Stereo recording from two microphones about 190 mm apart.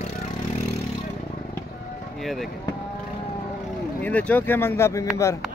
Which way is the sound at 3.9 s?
10° left (ahead or behind).